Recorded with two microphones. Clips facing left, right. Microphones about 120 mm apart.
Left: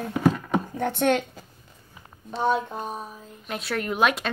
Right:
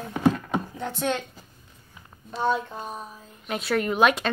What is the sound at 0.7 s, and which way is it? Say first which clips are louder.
Speech: left 8 dB; 60° left (ahead or behind).